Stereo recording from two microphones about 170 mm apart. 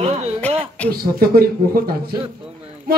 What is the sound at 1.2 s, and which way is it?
Speech, 65° right (ahead or behind).